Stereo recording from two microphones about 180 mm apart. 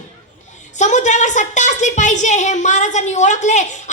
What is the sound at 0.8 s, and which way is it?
A woman's voice, 40° left (ahead or behind).